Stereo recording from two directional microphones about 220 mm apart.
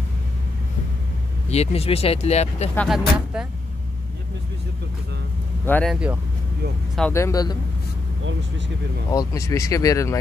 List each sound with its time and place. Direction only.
1.5 s speech: 30° left (ahead or behind)
2.7 s speech: centre (ahead or behind)
5.7 s speech: 5° left (ahead or behind)
7.0 s speech: 10° left (ahead or behind)
9.1 s speech: 15° left (ahead or behind)